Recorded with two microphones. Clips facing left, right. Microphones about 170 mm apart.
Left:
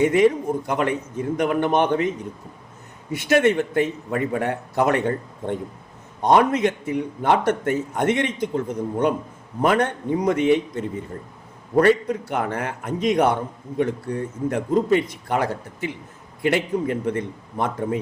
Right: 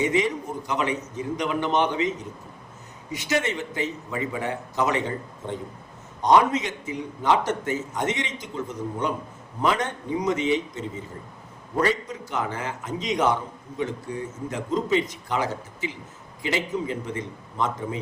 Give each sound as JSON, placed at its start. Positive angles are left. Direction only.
{"t": 0.0, "sound": "a man's voice", "side_deg": 55}